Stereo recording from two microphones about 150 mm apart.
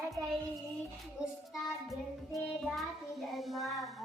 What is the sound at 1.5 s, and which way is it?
Child singing, centre (ahead or behind).